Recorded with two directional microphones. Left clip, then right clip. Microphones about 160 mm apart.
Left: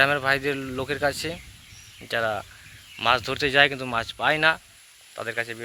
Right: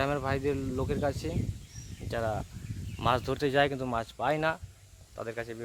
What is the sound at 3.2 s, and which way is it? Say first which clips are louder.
Speech: left 7 dB; 20° right (ahead or behind).